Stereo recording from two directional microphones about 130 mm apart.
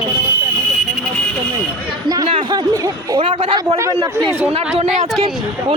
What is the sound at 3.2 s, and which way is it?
Speech, 45° right (ahead or behind).